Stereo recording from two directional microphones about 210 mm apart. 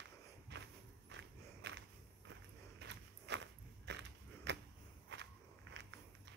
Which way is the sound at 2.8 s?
55° right (ahead or behind).